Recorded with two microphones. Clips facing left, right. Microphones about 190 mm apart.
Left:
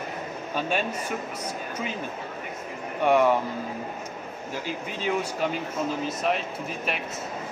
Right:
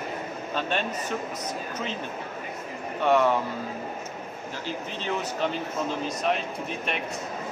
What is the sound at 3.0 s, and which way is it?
Speech, 15° left (ahead or behind).